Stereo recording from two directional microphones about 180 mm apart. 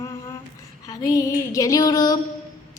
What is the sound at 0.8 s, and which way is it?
Female singing, 20° left (ahead or behind).